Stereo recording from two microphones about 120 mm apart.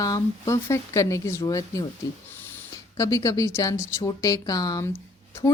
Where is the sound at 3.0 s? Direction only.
25° left (ahead or behind).